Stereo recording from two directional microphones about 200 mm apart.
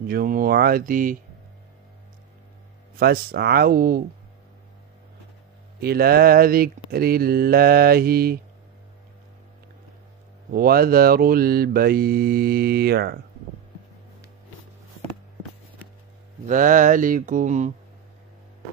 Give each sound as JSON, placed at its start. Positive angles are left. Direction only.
{"t": 0.0, "sound": "mantra", "side_deg": -50}
{"t": 3.0, "sound": "mantra", "side_deg": -50}
{"t": 5.8, "sound": "mantra", "side_deg": -50}
{"t": 10.5, "sound": "mantra", "side_deg": -50}
{"t": 16.4, "sound": "mantra", "side_deg": -40}